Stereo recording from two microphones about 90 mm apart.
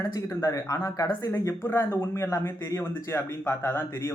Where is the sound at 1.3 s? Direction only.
25° left (ahead or behind).